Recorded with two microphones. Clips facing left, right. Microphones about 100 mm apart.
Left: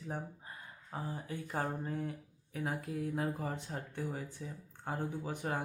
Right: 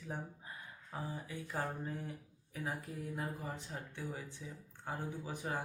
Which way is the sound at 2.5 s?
60° left (ahead or behind).